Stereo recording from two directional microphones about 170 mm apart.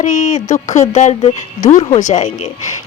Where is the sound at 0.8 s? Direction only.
40° left (ahead or behind).